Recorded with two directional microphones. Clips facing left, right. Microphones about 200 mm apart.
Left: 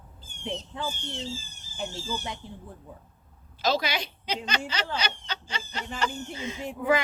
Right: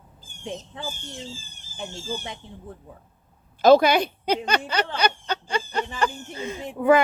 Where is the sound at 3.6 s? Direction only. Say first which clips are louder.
Right 12 dB; 55° right (ahead or behind).